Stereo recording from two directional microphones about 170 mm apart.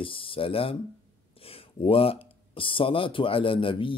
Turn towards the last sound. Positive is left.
turn(degrees=30)  # may be behind; listen again after turning